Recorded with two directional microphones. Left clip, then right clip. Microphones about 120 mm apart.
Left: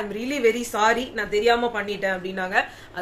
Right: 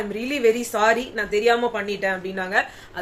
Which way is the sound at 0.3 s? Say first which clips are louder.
Right 2 dB; 15° right (ahead or behind).